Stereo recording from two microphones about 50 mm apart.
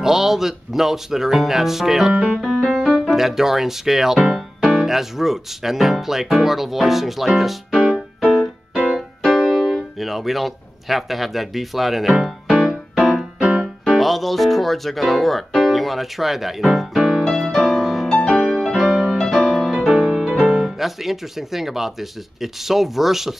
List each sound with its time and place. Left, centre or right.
0.0 s speech: centre
2.4 s music: centre
3.1 s speech: centre
8.2 s music: centre
8.9 s keyboard: centre
9.9 s speech: centre
13.4 s music: right
13.8 s speech: centre
17.2 s music: centre
19.9 s music: right
20.6 s speech: centre